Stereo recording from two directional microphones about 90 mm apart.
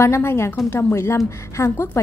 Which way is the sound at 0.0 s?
30° left (ahead or behind).